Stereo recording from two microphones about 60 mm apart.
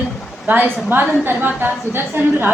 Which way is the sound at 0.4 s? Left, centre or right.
Right.